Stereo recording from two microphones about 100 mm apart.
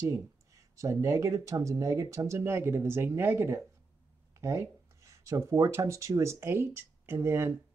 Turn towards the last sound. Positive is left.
turn(degrees=-25)  # may be behind; listen again after turning